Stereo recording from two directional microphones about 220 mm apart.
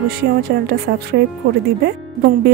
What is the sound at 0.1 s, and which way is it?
Speech, 45° right (ahead or behind).